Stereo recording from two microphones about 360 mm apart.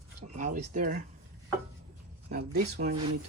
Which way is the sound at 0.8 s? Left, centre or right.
Right.